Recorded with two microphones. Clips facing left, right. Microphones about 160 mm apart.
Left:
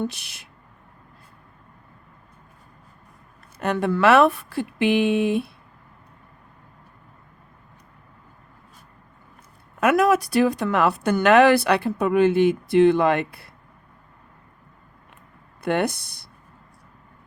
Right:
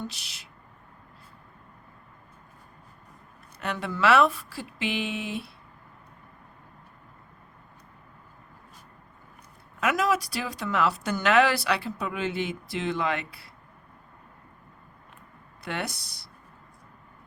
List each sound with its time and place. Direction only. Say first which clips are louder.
0.0 s speech: left 9 dB; 55° left (ahead or behind)
3.6 s speech: left 7 dB; 50° left (ahead or behind)
9.8 s speech: left 7 dB; 55° left (ahead or behind)
15.6 s speech: left 11 dB; 55° left (ahead or behind)